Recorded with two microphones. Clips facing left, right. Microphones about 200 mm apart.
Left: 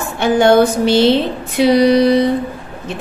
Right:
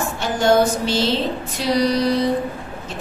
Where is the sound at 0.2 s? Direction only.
60° left (ahead or behind).